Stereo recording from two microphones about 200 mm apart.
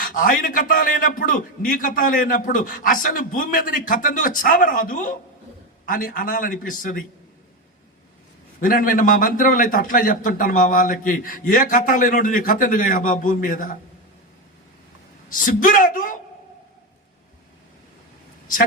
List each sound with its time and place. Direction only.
0.0 s a man's voice: 45° left (ahead or behind)
8.6 s a man's voice: 45° left (ahead or behind)
15.3 s a man's voice: 40° left (ahead or behind)